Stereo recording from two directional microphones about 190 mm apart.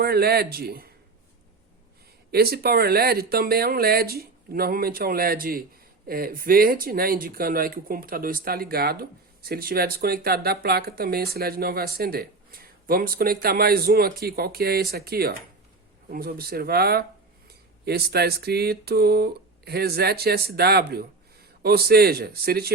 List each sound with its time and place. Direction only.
0.0 s speech: 55° right (ahead or behind)
2.3 s speech: 55° right (ahead or behind)